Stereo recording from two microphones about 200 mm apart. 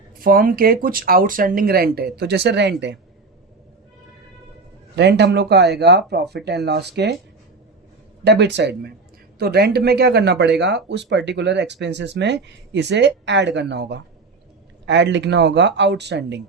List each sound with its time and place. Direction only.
0.2 s speech: 45° right (ahead or behind)
4.9 s speech: 60° right (ahead or behind)
8.2 s speech: 60° right (ahead or behind)